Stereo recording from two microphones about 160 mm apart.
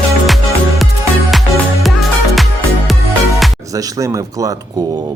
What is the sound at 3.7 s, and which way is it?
Speech, 20° right (ahead or behind).